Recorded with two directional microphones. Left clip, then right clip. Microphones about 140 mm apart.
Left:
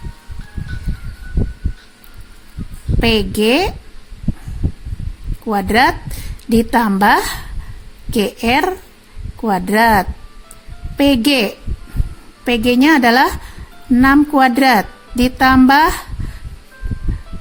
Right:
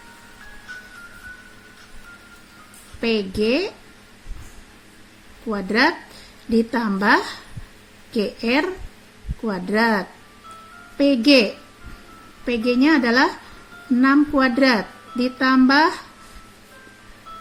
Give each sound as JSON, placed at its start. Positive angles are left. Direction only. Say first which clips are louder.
{"t": 3.0, "sound": "speech", "louder": "left 7 dB", "side_deg": 90}
{"t": 5.5, "sound": "speech", "louder": "left 6 dB", "side_deg": 90}
{"t": 12.5, "sound": "speech", "louder": "left 6 dB", "side_deg": 90}